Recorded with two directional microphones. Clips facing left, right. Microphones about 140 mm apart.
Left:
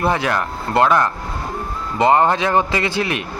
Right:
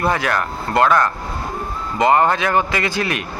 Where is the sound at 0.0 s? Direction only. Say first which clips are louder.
Even; 20° left (ahead or behind).